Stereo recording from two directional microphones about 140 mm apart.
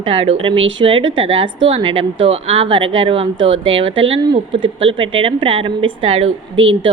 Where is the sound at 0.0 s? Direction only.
45° right (ahead or behind).